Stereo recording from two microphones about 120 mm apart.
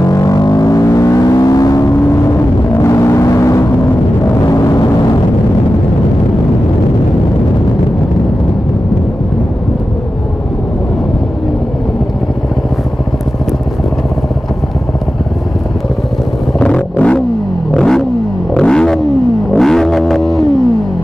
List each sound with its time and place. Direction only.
0.0 s vehicle: 30° left (ahead or behind)
4.5 s gong: 30° left (ahead or behind)
16.5 s vehicle: 10° left (ahead or behind)
18.5 s roaring cats: 5° left (ahead or behind)
19.5 s a sound: 5° left (ahead or behind)